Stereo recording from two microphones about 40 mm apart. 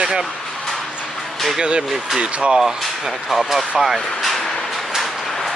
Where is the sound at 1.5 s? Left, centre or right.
Right.